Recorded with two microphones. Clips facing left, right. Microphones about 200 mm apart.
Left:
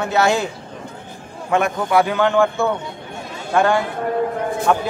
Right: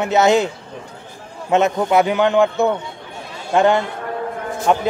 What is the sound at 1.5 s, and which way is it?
A man's voice, 20° right (ahead or behind).